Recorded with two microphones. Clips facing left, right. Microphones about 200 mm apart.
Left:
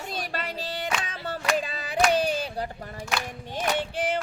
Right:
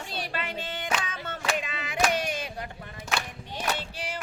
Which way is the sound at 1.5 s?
35° left (ahead or behind).